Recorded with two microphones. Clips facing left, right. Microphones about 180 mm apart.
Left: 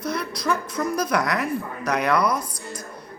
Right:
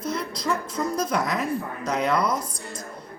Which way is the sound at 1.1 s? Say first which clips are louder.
Left 2 dB; 70° left (ahead or behind).